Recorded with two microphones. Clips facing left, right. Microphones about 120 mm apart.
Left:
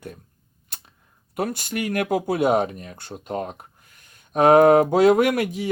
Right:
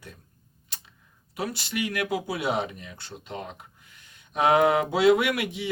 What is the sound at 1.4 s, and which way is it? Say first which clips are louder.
Speech: left 4 dB; 50° left (ahead or behind).